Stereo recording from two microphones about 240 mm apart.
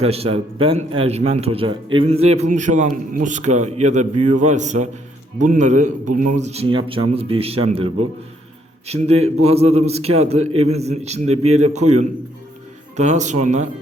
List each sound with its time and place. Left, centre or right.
0.0 s a man's voice: right
9.2 s a man's voice: right